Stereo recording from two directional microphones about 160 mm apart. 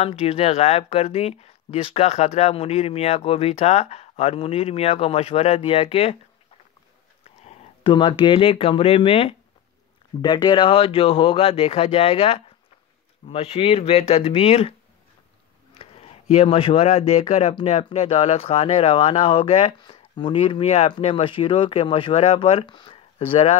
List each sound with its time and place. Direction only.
0.0 s speech: 40° left (ahead or behind)
7.2 s speech: 35° left (ahead or behind)
15.8 s speech: 40° left (ahead or behind)